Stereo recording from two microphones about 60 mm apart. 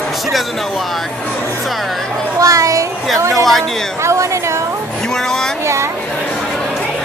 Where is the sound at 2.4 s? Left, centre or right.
Right.